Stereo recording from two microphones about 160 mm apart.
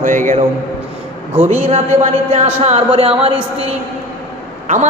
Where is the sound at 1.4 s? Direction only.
45° right (ahead or behind).